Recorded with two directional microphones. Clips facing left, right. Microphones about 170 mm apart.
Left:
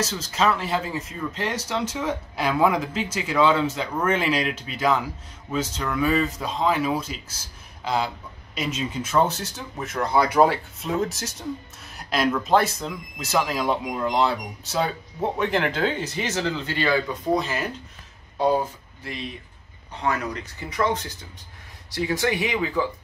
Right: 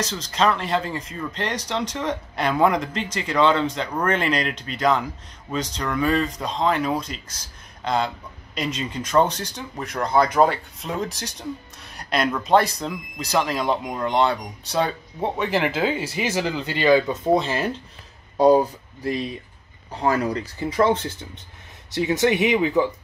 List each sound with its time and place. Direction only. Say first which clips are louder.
0.0 s speech: right 1 dB; 5° left (ahead or behind); by 17.6 s 25° right (ahead or behind)
18.4 s speech: right 6 dB; 40° right (ahead or behind); by 22.9 s 20° right (ahead or behind)